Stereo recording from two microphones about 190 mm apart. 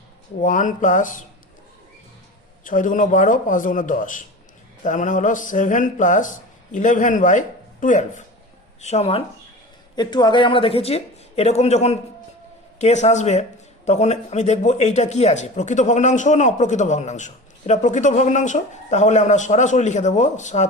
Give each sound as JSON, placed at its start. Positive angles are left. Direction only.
{"t": 0.4, "sound": "a man's voice", "side_deg": 40}
{"t": 2.6, "sound": "a man's voice", "side_deg": 45}
{"t": 9.9, "sound": "speech", "side_deg": 20}